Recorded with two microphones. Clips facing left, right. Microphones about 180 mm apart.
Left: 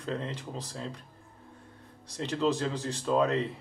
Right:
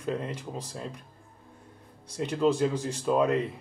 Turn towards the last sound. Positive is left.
turn(degrees=-10)  # may be behind; listen again after turning